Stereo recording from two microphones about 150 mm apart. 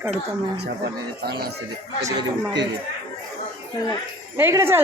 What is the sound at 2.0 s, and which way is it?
Speech, 20° right (ahead or behind).